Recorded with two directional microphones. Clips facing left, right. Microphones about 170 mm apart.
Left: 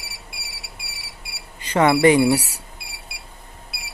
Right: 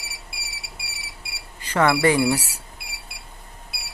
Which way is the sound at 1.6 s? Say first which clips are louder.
Left 4 dB; 20° left (ahead or behind).